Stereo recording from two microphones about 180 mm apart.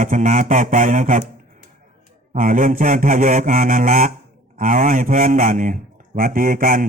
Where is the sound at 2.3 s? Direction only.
50° right (ahead or behind).